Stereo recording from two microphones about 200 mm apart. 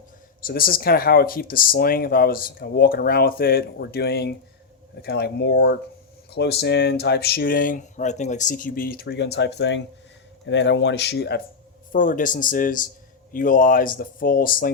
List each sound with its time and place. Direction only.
0.4 s speech: 45° left (ahead or behind)
11.9 s speech: 40° left (ahead or behind)